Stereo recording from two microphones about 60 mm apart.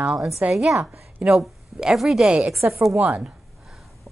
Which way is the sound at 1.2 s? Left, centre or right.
Centre.